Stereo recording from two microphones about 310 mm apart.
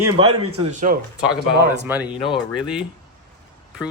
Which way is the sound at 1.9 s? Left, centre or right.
Centre.